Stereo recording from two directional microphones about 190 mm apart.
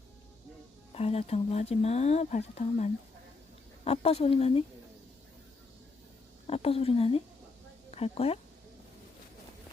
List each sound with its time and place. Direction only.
0.9 s speech: 30° left (ahead or behind)
6.5 s a woman's voice: 30° left (ahead or behind)